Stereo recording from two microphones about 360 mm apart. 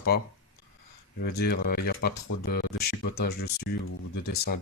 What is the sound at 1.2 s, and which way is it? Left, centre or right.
Speech, left.